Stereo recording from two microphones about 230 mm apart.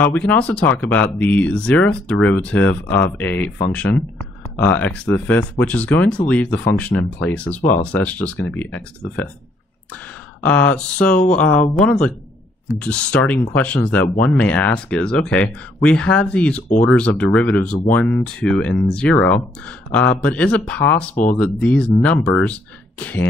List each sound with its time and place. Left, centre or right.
0.0 s speech: centre
10.4 s speech: centre
12.7 s speech: centre
21.1 s speech: left
21.4 s speech: centre